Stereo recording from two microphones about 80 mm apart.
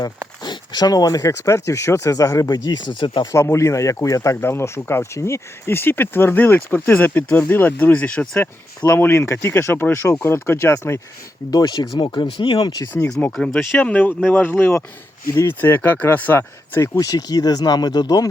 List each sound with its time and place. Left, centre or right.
0.4 s speech: left
3.3 s speech: left; by 8.4 s centre
9.0 s speech: left
11.5 s speech: left
11.9 s speech: left
13.4 s speech: centre; by 17.0 s left
17.0 s speech: left